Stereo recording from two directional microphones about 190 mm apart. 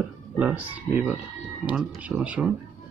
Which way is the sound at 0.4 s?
5° right (ahead or behind).